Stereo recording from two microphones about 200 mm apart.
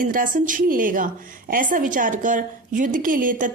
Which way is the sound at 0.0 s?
45° right (ahead or behind).